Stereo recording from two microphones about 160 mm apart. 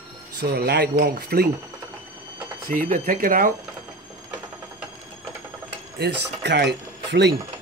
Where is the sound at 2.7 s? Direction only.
55° right (ahead or behind).